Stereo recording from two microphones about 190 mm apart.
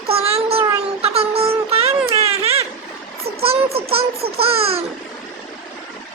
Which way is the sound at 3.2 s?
30° right (ahead or behind).